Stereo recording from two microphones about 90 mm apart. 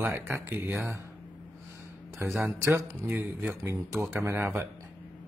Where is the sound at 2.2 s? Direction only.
25° right (ahead or behind).